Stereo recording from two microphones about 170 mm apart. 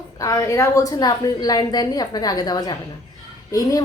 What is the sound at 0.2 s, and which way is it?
Speech, 20° left (ahead or behind).